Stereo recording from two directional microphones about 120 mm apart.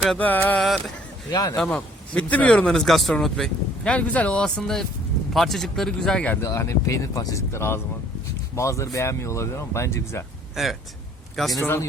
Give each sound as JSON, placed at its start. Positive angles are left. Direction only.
{"t": 0.2, "sound": "speech", "side_deg": 15}
{"t": 1.3, "sound": "speech", "side_deg": 35}
{"t": 1.5, "sound": "speech", "side_deg": 5}
{"t": 6.5, "sound": "speech", "side_deg": 25}
{"t": 10.5, "sound": "speech", "side_deg": 0}
{"t": 11.6, "sound": "speech", "side_deg": 20}